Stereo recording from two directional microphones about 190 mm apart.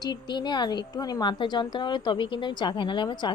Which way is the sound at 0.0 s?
20° left (ahead or behind).